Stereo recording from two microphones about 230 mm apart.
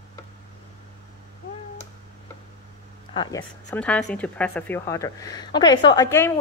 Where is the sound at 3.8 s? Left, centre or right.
Centre.